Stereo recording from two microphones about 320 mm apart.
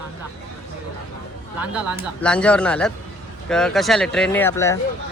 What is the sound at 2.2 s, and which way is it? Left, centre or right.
Speech, centre.